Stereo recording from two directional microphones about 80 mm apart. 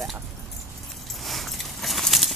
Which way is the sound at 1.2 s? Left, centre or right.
Centre.